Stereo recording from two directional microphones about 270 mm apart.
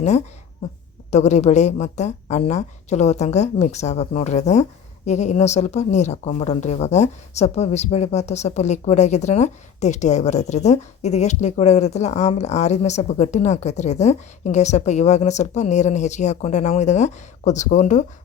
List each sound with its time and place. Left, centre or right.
1.1 s speech: left